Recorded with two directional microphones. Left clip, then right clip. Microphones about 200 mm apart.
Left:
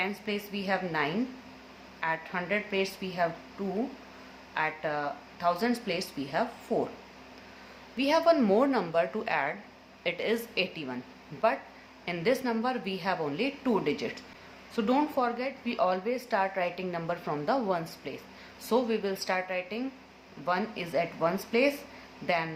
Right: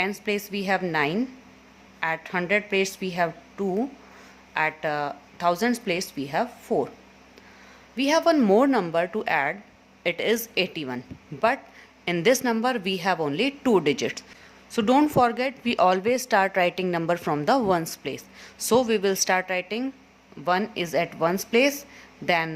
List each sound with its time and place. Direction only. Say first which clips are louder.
0.0 s speech: right 6 dB; 40° right (ahead or behind)
4.5 s speech: right 5 dB; 35° right (ahead or behind)
7.9 s a woman's voice: right 3 dB; 35° right (ahead or behind)